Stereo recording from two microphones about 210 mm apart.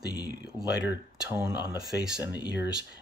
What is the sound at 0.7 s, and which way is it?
Speech, 10° right (ahead or behind).